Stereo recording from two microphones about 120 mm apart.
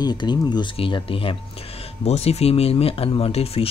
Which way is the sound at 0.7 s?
50° left (ahead or behind).